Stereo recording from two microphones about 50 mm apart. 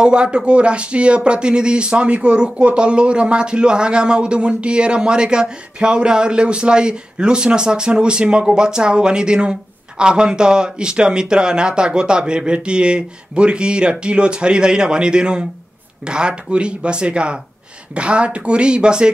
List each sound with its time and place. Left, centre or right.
0.0 s speech: centre